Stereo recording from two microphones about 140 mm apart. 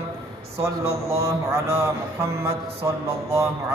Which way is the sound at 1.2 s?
20° right (ahead or behind).